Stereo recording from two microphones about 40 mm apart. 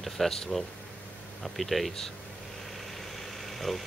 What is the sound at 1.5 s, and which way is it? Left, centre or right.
Speech, centre.